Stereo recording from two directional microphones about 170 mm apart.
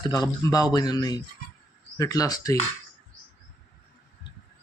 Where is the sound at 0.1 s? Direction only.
20° left (ahead or behind).